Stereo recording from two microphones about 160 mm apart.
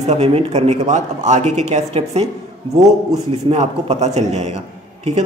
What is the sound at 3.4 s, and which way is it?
A man's voice, 40° right (ahead or behind).